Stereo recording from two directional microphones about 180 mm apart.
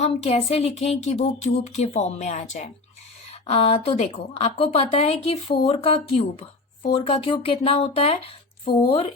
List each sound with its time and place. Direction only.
0.0 s speech: 35° left (ahead or behind)